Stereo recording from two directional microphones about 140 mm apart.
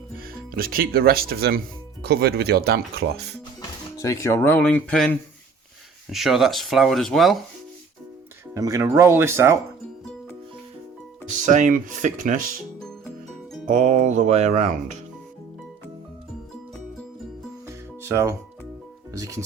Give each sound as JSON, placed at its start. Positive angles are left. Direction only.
{"t": 0.2, "sound": "speech", "side_deg": -90}
{"t": 3.9, "sound": "speech", "side_deg": 20}
{"t": 8.5, "sound": "speech", "side_deg": -25}
{"t": 11.3, "sound": "speech", "side_deg": -65}
{"t": 13.7, "sound": "speech", "side_deg": -65}
{"t": 17.7, "sound": "music", "side_deg": -20}
{"t": 19.1, "sound": "speech", "side_deg": -25}